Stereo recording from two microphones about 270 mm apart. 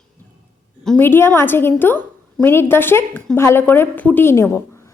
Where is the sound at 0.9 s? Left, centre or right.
Centre.